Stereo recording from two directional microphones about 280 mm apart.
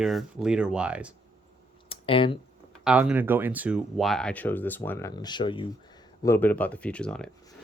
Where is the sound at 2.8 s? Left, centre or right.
Centre.